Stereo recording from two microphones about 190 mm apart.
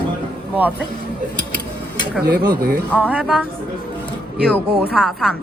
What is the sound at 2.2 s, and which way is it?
Speech, 55° right (ahead or behind).